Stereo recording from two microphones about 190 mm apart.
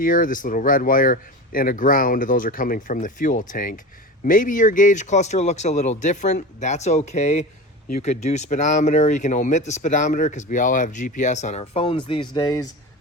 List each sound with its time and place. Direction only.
0.0 s speech: 45° left (ahead or behind); by 12.6 s 20° left (ahead or behind)